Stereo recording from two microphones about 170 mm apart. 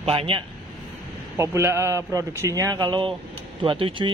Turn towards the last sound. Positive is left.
turn(degrees=-30)  # may be behind; listen again after turning